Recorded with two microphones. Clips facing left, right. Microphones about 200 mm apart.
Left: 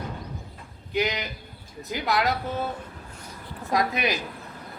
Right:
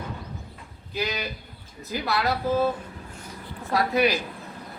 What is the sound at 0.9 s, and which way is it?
Speech, 15° left (ahead or behind).